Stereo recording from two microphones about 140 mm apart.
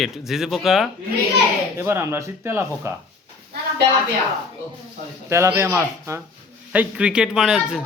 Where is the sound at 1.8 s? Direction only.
15° right (ahead or behind).